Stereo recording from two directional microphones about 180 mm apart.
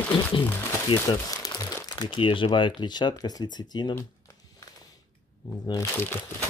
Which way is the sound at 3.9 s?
20° left (ahead or behind).